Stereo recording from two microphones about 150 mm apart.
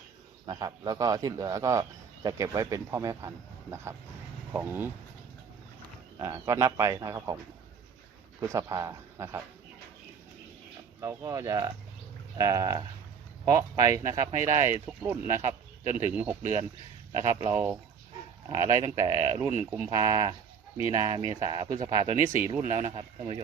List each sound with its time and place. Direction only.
0.4 s speech: 25° right (ahead or behind)
6.1 s speech: 20° right (ahead or behind)
8.4 s speech: 20° right (ahead or behind)
11.0 s speech: 25° right (ahead or behind)
22.9 s speech: 35° right (ahead or behind)